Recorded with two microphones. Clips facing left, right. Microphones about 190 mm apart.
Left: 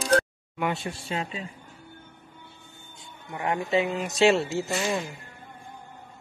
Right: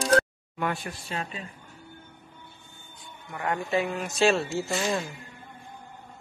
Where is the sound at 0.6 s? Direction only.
25° left (ahead or behind).